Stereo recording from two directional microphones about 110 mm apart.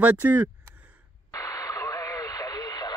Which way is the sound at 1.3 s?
30° left (ahead or behind).